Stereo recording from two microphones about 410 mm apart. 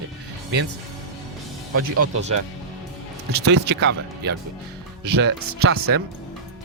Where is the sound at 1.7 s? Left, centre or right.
Right.